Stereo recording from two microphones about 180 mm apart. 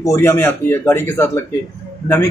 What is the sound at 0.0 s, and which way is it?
Speech, 15° left (ahead or behind).